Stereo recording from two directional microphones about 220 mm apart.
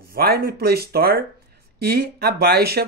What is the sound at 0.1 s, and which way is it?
A man's voice, 45° right (ahead or behind).